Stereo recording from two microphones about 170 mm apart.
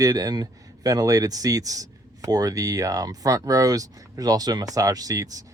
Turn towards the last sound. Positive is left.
turn(degrees=-20)  # may be behind; listen again after turning